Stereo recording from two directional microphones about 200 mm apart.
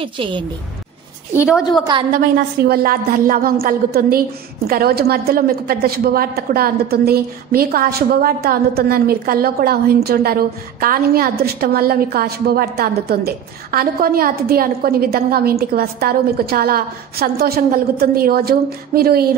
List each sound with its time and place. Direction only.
0.0 s a woman's voice: 25° right (ahead or behind)
2.1 s a woman's voice: 50° right (ahead or behind)